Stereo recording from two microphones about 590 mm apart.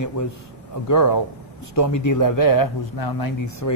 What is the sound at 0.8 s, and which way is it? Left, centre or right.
A man's voice, left.